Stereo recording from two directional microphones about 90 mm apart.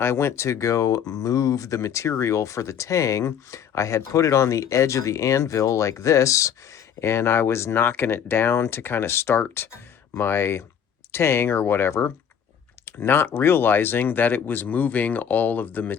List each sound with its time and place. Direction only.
0.0 s speech: 30° left (ahead or behind)